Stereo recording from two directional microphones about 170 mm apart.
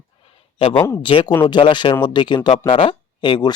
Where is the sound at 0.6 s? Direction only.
30° left (ahead or behind).